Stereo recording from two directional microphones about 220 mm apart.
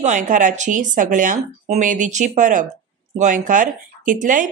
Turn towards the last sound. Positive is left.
turn(degrees=-35)  # may be behind; listen again after turning